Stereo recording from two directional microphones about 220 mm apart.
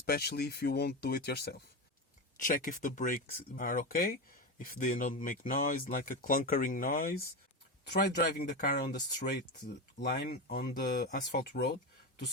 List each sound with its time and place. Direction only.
0.0 s speech: 45° left (ahead or behind)
10.0 s speech: 50° left (ahead or behind)